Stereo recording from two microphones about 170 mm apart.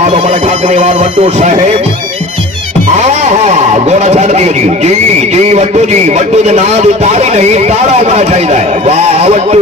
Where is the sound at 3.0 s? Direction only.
40° right (ahead or behind).